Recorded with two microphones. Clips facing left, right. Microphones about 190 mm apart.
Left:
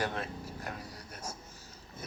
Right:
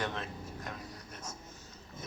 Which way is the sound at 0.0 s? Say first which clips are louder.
Left 2 dB; 35° left (ahead or behind).